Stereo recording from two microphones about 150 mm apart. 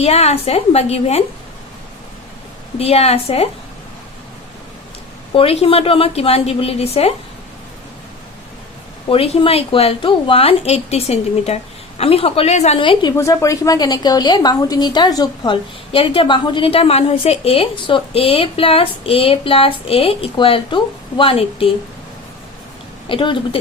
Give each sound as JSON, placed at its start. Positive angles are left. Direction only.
{"t": 0.0, "sound": "a woman's voice", "side_deg": 45}
{"t": 2.7, "sound": "a woman's voice", "side_deg": 45}
{"t": 5.3, "sound": "a woman's voice", "side_deg": 40}
{"t": 9.0, "sound": "a woman's voice", "side_deg": 40}
{"t": 12.8, "sound": "a woman's voice", "side_deg": 30}
{"t": 13.1, "sound": "a woman's voice", "side_deg": 20}
{"t": 23.0, "sound": "a woman's voice", "side_deg": 35}